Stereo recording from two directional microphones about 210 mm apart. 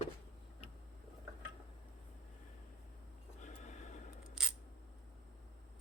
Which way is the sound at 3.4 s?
35° left (ahead or behind).